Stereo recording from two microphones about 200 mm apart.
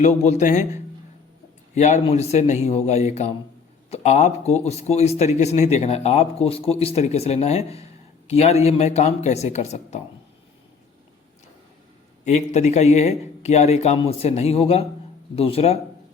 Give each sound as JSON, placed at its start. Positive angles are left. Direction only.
{"t": 0.0, "sound": "speech", "side_deg": 35}
{"t": 1.7, "sound": "speech", "side_deg": 35}
{"t": 12.2, "sound": "speech", "side_deg": 35}